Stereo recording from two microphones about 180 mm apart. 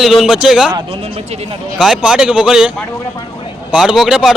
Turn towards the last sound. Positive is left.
turn(degrees=0)  # may be behind; listen again after turning